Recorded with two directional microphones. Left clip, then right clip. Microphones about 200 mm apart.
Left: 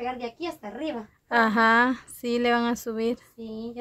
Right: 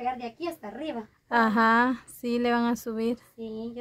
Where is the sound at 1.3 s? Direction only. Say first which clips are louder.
Left 2 dB; centre (ahead or behind).